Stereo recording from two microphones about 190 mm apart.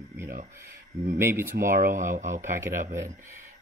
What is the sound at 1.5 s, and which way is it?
Speech, 45° right (ahead or behind).